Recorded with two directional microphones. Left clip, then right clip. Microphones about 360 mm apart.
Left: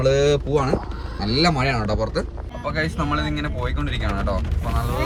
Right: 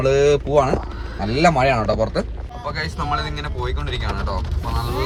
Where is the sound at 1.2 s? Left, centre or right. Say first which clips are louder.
Even; right.